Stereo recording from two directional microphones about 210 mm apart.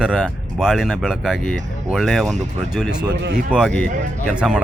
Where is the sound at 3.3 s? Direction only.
Centre (ahead or behind).